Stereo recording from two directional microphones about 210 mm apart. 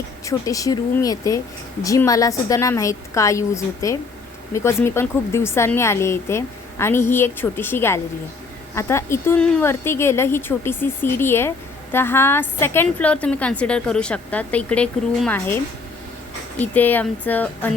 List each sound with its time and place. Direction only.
0.3 s speech: 15° left (ahead or behind)